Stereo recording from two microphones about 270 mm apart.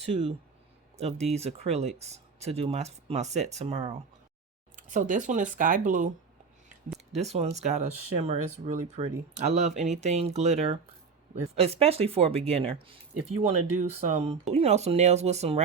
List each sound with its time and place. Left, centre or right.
0.1 s speech: right
7.3 s speech: right